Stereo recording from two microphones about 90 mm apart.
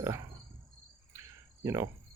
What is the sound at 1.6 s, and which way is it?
Speech, 35° right (ahead or behind).